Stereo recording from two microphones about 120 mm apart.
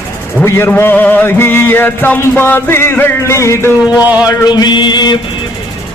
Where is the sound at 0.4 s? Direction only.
20° left (ahead or behind).